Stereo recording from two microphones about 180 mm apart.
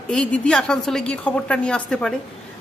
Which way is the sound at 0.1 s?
5° left (ahead or behind).